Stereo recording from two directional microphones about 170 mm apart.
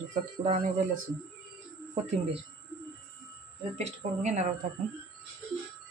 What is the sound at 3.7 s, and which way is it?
Speech, 40° right (ahead or behind).